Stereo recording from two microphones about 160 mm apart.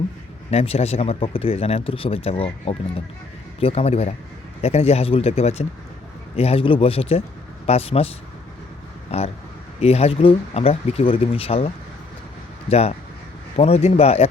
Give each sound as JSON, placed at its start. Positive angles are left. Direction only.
{"t": 0.5, "sound": "speech", "side_deg": 40}